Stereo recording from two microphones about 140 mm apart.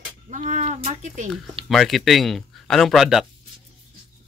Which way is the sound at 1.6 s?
Centre (ahead or behind).